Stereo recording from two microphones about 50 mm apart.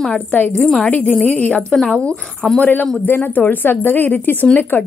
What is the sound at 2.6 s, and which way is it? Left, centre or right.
A woman's voice, left.